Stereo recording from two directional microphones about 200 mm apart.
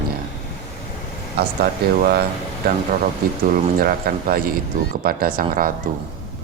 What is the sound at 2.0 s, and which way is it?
Speech, 50° right (ahead or behind).